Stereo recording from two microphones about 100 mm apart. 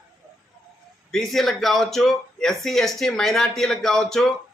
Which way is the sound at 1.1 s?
Centre (ahead or behind).